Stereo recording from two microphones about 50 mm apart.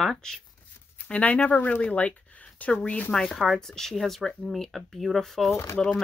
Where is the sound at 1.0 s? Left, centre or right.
Left.